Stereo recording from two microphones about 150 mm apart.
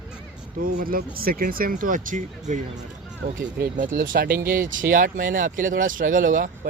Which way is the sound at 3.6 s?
70° right (ahead or behind).